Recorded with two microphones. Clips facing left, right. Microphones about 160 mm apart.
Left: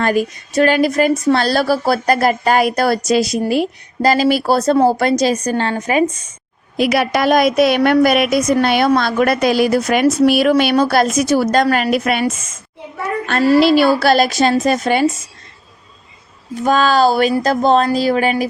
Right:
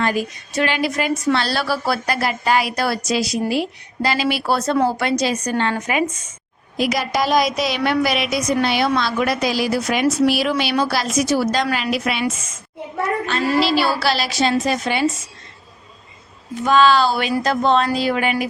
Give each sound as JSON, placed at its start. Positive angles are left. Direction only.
{"t": 0.0, "sound": "a woman's voice", "side_deg": 50}
{"t": 6.7, "sound": "a woman's voice", "side_deg": 65}
{"t": 13.2, "sound": "a woman's voice", "side_deg": 55}
{"t": 16.6, "sound": "a woman's voice", "side_deg": 45}